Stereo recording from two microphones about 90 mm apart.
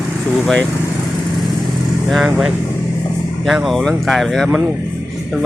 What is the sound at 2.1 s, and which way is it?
Speech, 5° right (ahead or behind).